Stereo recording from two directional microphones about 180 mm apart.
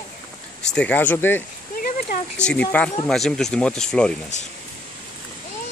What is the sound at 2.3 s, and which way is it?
Speech, 5° left (ahead or behind).